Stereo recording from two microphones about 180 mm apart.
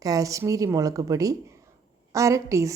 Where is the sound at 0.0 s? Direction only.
20° right (ahead or behind).